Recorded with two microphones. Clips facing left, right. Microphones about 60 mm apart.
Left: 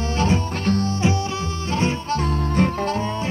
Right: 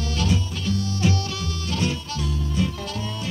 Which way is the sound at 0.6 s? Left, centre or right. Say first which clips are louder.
Left 6 dB; left.